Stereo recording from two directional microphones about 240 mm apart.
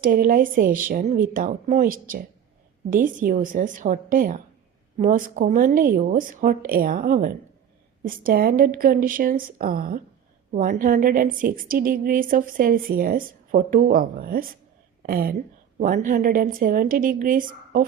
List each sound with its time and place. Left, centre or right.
0.0 s a woman's voice: right